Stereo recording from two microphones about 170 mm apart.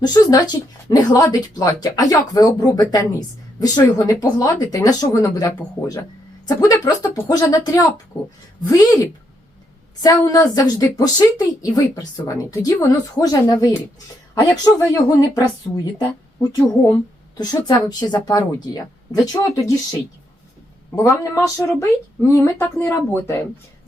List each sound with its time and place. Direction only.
0.0 s a woman's voice: 20° left (ahead or behind)
16.4 s a woman's voice: 20° left (ahead or behind)
20.9 s speech: 15° left (ahead or behind)